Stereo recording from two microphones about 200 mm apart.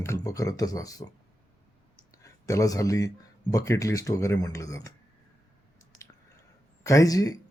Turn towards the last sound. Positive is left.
turn(degrees=15)  # may be behind; listen again after turning